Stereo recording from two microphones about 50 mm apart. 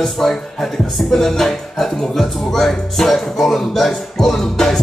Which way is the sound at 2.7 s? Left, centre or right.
Centre.